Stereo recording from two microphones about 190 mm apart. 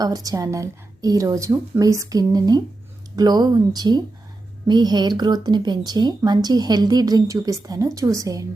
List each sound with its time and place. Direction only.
0.0 s speech: 20° right (ahead or behind)